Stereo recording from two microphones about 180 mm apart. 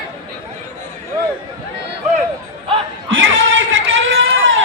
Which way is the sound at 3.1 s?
90° right.